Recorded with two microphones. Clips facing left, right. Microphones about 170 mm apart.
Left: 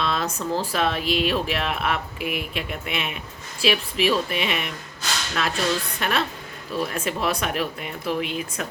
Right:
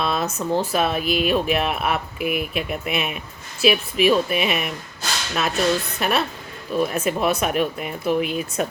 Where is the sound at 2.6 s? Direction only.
20° right (ahead or behind).